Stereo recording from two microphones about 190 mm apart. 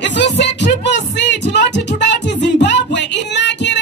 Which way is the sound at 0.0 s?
65° left (ahead or behind).